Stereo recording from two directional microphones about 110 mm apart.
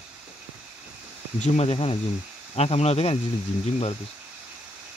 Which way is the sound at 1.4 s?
65° left (ahead or behind).